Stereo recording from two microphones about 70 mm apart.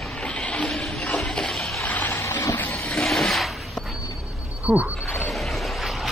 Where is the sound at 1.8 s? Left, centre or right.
Left.